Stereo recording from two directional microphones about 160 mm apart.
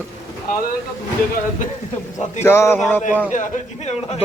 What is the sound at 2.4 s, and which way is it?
Speech, 15° left (ahead or behind).